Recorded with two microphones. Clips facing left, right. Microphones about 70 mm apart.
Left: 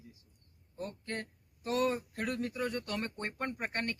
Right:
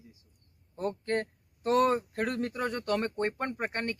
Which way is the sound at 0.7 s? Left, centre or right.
Right.